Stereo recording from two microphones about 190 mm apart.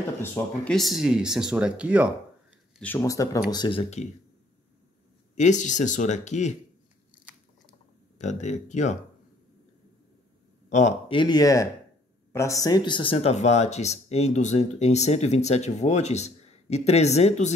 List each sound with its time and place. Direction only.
0.2 s speech: 10° left (ahead or behind)
0.7 s speech: centre (ahead or behind)
2.8 s speech: 15° left (ahead or behind)
5.3 s speech: 40° left (ahead or behind)
8.2 s speech: 40° left (ahead or behind)
10.7 s speech: 40° left (ahead or behind)
11.1 s speech: 20° left (ahead or behind)